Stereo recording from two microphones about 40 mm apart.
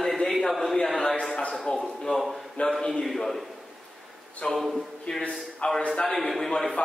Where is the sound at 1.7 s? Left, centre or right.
Left.